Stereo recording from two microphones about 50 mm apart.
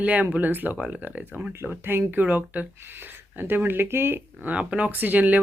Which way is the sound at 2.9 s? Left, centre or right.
Right.